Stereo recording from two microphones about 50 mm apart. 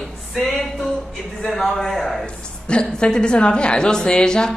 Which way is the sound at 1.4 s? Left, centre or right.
Centre.